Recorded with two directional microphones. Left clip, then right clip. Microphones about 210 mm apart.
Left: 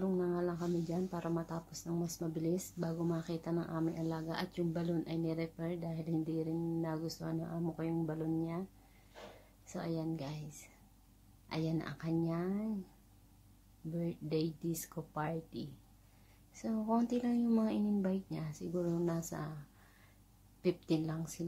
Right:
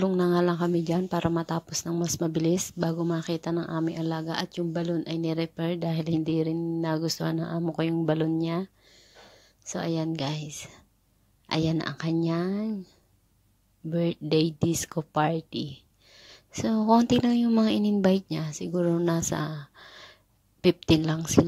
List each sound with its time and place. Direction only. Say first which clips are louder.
0.0 s speech: right 12 dB; 40° right (ahead or behind)
9.7 s speech: right 10 dB; 35° right (ahead or behind)
13.9 s speech: right 13 dB; 40° right (ahead or behind)
20.6 s speech: right 13 dB; 40° right (ahead or behind)